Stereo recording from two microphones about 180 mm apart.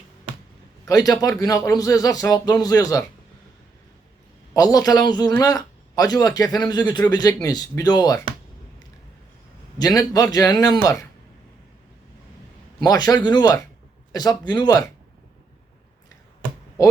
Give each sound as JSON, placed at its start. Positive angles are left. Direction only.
{"t": 0.9, "sound": "a man's voice", "side_deg": 20}
{"t": 4.5, "sound": "a man's voice", "side_deg": 20}
{"t": 9.7, "sound": "a man's voice", "side_deg": 20}
{"t": 12.8, "sound": "a man's voice", "side_deg": 20}